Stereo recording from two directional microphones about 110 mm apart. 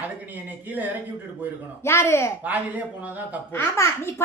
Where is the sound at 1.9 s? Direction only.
25° left (ahead or behind).